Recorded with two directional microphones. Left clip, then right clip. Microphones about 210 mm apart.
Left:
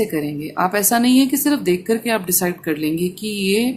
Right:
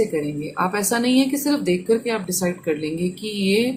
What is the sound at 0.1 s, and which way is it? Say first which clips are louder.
A woman's voice: left 1 dB; 20° left (ahead or behind).